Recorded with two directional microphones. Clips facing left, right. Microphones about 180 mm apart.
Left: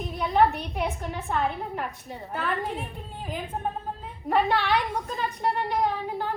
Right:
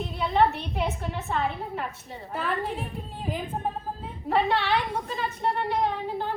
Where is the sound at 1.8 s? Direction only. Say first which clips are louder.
Left 1 dB; 15° left (ahead or behind).